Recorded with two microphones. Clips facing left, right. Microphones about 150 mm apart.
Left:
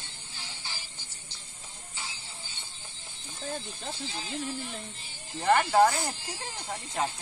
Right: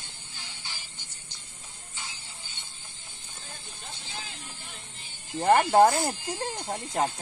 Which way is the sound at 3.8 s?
35° left (ahead or behind).